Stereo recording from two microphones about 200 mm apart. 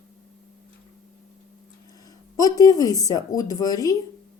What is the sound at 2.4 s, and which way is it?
A woman's voice, 20° left (ahead or behind).